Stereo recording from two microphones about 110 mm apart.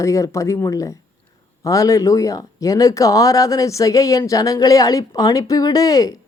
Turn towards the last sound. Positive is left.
turn(degrees=35)  # may be behind; listen again after turning